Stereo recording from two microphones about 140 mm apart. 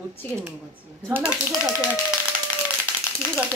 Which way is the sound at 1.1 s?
15° right (ahead or behind).